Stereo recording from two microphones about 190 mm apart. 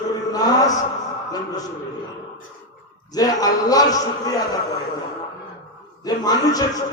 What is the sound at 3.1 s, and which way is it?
A man's voice, 20° left (ahead or behind).